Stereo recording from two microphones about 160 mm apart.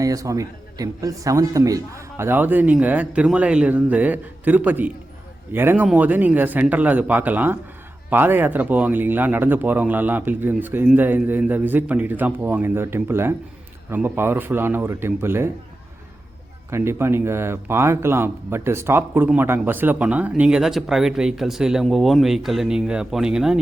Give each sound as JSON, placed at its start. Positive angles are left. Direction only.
{"t": 0.0, "sound": "speech", "side_deg": -20}
{"t": 16.6, "sound": "speech", "side_deg": -15}